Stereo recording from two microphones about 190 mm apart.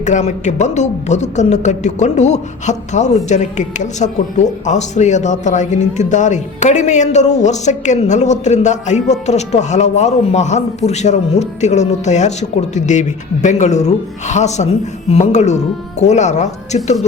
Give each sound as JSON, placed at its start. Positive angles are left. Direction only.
{"t": 0.0, "sound": "a woman's voice", "side_deg": 40}